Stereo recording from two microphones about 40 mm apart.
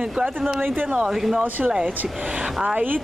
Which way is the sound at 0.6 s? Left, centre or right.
Right.